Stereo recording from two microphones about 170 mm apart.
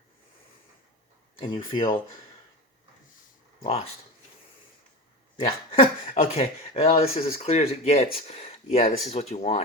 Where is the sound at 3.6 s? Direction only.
35° left (ahead or behind).